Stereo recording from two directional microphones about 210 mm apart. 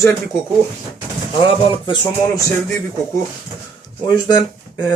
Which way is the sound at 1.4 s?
20° left (ahead or behind).